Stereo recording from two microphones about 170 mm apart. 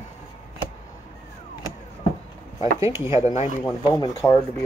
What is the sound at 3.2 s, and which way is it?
Speech, 40° left (ahead or behind).